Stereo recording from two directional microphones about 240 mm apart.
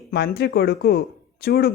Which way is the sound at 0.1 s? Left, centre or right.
Left.